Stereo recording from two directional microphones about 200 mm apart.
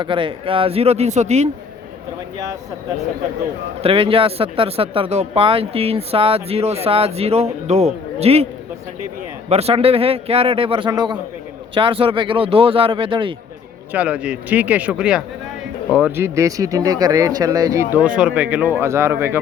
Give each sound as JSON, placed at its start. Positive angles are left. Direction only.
{"t": 0.0, "sound": "speech", "side_deg": -25}
{"t": 3.8, "sound": "speech", "side_deg": -25}
{"t": 9.5, "sound": "speech", "side_deg": -30}
{"t": 13.9, "sound": "speech", "side_deg": -5}